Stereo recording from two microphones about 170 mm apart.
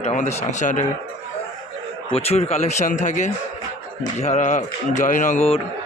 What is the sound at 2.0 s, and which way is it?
A man's voice, 35° left (ahead or behind).